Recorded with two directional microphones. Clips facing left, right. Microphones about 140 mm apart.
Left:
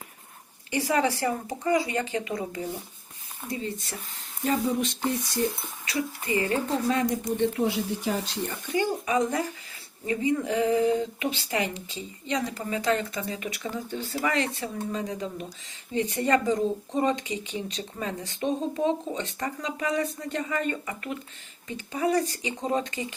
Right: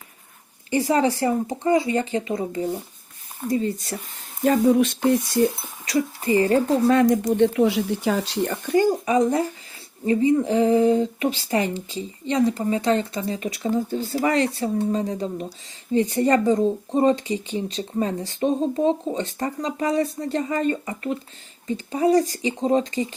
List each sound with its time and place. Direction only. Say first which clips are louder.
0.7 s speech: right 5 dB; 35° right (ahead or behind)
3.5 s speech: right 9 dB; 40° right (ahead or behind)
4.4 s speech: right 9 dB; 55° right (ahead or behind)
5.8 s speech: right 8 dB; 35° right (ahead or behind)
6.8 s speech: right 10 dB; 55° right (ahead or behind)
7.3 s speech: right 7 dB; 85° right
8.7 s speech: right 7 dB; 40° right (ahead or behind)